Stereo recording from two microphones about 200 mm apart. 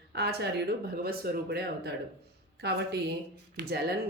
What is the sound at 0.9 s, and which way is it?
Speech, 50° right (ahead or behind).